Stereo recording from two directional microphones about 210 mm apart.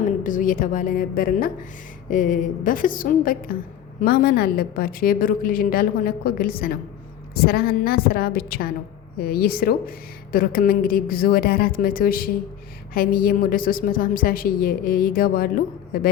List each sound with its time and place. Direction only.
0.2 s a woman's voice: 40° left (ahead or behind)